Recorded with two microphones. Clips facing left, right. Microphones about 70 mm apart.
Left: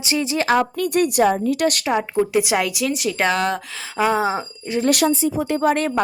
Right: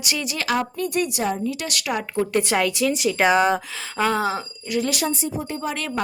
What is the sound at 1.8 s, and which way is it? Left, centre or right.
Speech, left.